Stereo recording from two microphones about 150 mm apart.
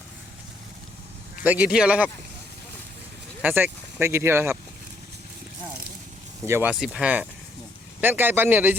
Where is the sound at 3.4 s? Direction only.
10° right (ahead or behind).